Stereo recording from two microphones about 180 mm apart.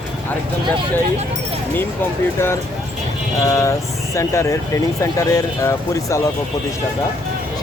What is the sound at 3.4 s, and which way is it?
Speech, 15° left (ahead or behind).